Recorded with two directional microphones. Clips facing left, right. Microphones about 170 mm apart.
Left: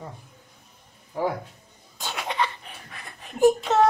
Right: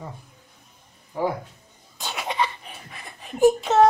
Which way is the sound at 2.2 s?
10° right (ahead or behind).